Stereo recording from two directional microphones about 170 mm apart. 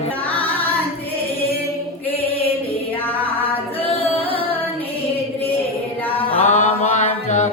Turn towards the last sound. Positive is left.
turn(degrees=45)  # may be behind; listen again after turning